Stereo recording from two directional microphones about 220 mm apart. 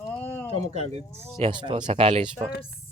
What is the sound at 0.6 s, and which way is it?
Speech, 30° right (ahead or behind).